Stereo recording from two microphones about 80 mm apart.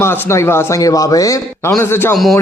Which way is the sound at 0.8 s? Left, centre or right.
Left.